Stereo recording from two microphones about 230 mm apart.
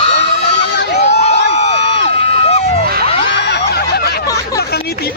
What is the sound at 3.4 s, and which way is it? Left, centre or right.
Snicker, left.